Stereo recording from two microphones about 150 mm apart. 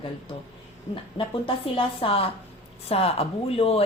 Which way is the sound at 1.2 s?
35° left (ahead or behind).